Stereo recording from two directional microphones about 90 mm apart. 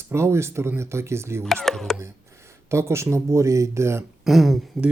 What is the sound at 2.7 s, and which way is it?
Speech, 30° right (ahead or behind).